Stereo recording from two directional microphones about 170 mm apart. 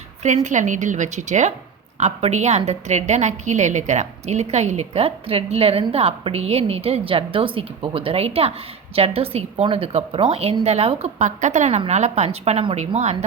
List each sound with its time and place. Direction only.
0.4 s a woman's voice: 45° right (ahead or behind)